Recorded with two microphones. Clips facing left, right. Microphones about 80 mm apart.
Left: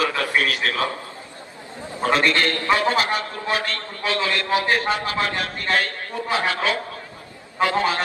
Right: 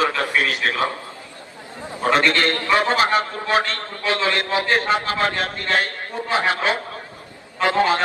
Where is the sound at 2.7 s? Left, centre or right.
Right.